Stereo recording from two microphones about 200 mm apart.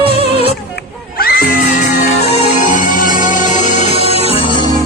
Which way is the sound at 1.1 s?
50° left (ahead or behind).